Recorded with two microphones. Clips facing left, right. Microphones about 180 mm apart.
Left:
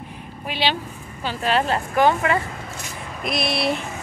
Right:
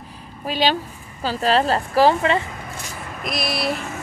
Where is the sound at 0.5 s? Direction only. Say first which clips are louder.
Right 4 dB; 40° right (ahead or behind).